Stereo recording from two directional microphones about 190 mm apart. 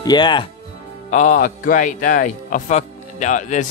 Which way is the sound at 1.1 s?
40° left (ahead or behind).